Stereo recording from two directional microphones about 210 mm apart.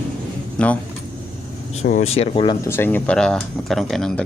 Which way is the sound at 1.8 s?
35° left (ahead or behind).